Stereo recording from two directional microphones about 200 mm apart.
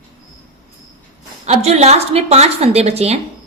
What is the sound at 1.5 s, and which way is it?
A woman's voice, 30° right (ahead or behind).